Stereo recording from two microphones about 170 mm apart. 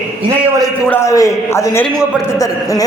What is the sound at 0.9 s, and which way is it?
A man's voice, 15° left (ahead or behind).